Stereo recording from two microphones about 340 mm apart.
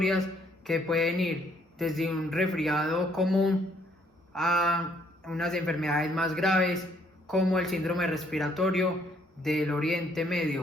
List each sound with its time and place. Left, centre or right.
0.0 s speech: centre